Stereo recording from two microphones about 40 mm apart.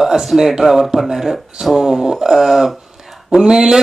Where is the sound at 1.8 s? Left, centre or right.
Centre.